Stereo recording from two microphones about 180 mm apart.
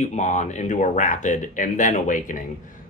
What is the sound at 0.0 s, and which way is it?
Speech, 40° left (ahead or behind).